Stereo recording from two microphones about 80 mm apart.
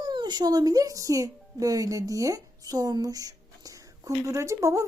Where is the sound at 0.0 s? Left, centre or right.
Right.